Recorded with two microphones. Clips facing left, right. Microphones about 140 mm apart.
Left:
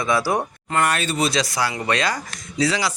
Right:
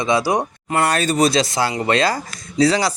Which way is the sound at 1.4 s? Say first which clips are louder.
Right 4 dB; 25° right (ahead or behind).